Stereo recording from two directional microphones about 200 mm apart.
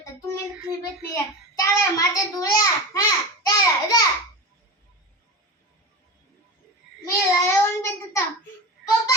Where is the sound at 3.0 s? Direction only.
15° left (ahead or behind).